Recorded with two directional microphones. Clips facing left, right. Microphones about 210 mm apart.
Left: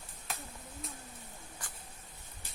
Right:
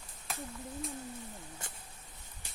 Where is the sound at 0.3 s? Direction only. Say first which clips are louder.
Right 2 dB; centre (ahead or behind).